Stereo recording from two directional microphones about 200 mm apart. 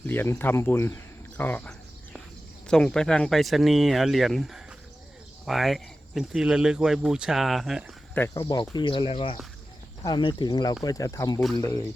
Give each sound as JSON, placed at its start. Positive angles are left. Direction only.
{"t": 0.1, "sound": "speech", "side_deg": 10}
{"t": 8.1, "sound": "speech", "side_deg": 10}